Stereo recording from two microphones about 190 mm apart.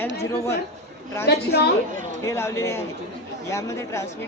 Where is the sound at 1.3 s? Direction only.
60° left (ahead or behind).